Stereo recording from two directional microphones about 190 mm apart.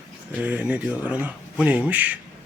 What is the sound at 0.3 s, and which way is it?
Speech, 5° right (ahead or behind).